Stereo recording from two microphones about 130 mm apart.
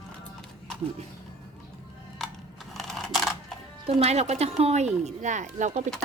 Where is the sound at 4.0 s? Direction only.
55° right (ahead or behind).